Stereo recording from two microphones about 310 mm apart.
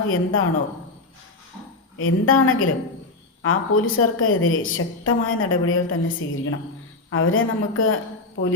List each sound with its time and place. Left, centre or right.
0.1 s a woman's voice: left
2.0 s a woman's voice: left